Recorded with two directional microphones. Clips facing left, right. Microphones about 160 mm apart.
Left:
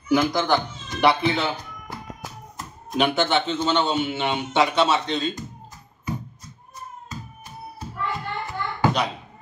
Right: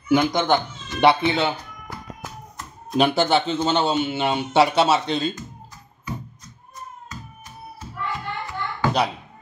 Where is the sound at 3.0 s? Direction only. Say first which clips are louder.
Right 2 dB; 35° right (ahead or behind).